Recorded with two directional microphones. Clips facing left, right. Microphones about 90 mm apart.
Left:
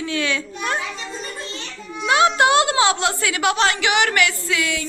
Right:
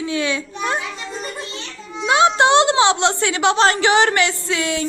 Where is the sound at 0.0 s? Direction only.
20° right (ahead or behind).